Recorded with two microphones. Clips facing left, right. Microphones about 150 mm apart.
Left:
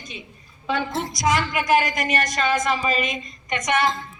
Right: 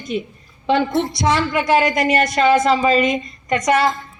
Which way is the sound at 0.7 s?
30° right (ahead or behind).